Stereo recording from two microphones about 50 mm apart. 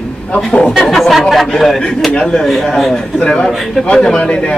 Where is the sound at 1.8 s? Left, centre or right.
Centre.